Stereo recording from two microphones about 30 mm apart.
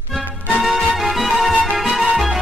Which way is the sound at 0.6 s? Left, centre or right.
Centre.